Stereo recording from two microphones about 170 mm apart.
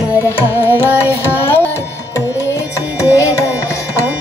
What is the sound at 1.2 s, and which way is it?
Music, 15° left (ahead or behind).